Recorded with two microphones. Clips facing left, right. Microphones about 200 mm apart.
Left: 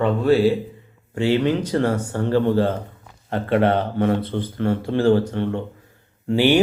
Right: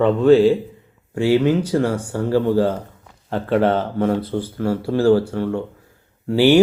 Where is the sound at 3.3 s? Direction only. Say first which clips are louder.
Right 1 dB; 60° left (ahead or behind).